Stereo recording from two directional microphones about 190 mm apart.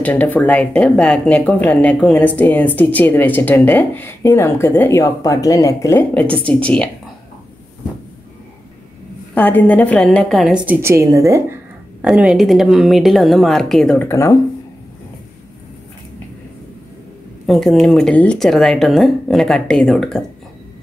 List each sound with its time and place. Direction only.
0.0 s speech: 10° left (ahead or behind)
9.3 s speech: 10° left (ahead or behind); by 11.4 s 15° right (ahead or behind)
12.0 s speech: 5° right (ahead or behind)
14.0 s speech: 15° left (ahead or behind)
17.5 s speech: centre (ahead or behind)